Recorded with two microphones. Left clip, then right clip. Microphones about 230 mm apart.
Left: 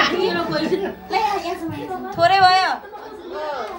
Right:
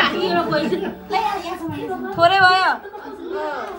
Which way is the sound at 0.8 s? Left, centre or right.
Centre.